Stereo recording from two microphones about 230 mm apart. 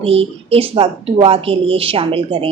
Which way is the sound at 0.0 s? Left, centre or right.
Right.